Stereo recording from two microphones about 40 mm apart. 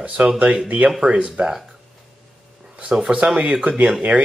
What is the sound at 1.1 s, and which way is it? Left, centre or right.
Speech, right.